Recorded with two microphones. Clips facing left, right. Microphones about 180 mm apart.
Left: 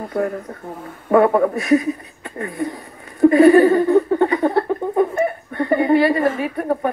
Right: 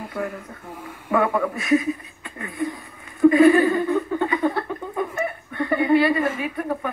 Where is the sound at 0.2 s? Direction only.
45° left (ahead or behind).